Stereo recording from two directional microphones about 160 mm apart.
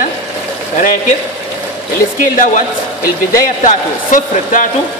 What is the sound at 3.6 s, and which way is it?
Speech, 55° left (ahead or behind).